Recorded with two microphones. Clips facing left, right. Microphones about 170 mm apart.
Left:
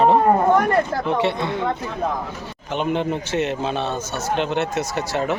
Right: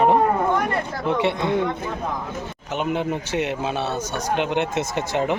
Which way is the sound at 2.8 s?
10° right (ahead or behind).